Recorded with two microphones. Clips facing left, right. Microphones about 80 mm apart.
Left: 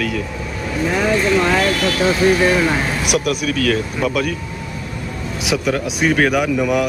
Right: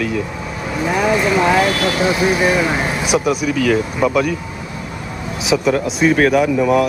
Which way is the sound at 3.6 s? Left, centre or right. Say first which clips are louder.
Right 3 dB; centre.